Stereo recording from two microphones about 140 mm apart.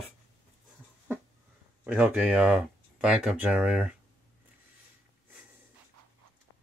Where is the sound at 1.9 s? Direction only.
10° right (ahead or behind).